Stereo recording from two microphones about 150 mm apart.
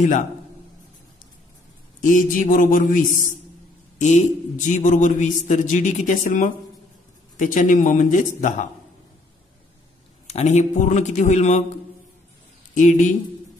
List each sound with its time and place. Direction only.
2.0 s speech: 60° left (ahead or behind)
10.2 s a man's voice: 45° left (ahead or behind)
12.7 s speech: 55° left (ahead or behind)